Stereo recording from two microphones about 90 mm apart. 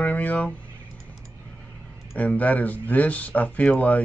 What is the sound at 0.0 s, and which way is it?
Speech, 20° left (ahead or behind).